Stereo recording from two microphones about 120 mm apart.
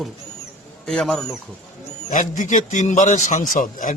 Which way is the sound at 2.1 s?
90° left.